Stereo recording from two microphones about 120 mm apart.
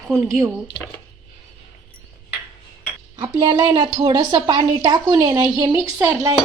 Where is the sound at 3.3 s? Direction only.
35° right (ahead or behind).